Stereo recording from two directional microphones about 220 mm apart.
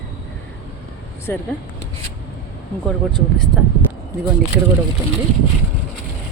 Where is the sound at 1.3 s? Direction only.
10° left (ahead or behind).